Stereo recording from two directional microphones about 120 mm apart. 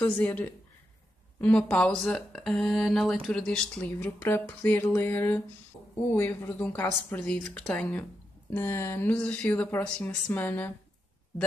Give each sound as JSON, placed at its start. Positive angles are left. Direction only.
{"t": 0.0, "sound": "speech", "side_deg": 10}
{"t": 7.2, "sound": "speech", "side_deg": 5}